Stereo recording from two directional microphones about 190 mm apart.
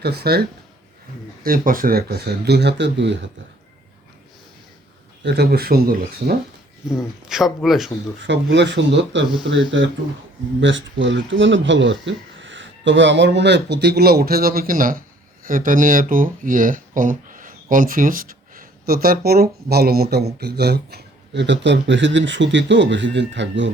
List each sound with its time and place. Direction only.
0.0 s speech: 60° right (ahead or behind)
1.5 s speech: 50° right (ahead or behind); by 3.2 s 65° right (ahead or behind)
5.2 s speech: 60° right (ahead or behind)
6.9 s speech: centre (ahead or behind)
8.2 s speech: 65° right (ahead or behind)